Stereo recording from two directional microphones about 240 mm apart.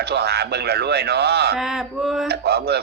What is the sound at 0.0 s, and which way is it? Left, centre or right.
A man's voice, right.